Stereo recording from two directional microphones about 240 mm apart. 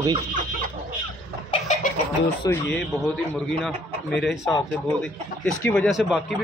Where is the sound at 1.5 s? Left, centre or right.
Left.